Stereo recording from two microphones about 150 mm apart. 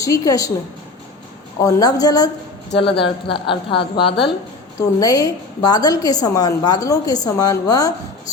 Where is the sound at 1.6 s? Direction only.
25° left (ahead or behind).